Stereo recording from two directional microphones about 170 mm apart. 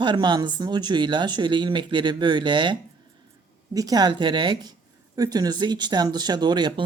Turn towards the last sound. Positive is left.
turn(degrees=-25)  # may be behind; listen again after turning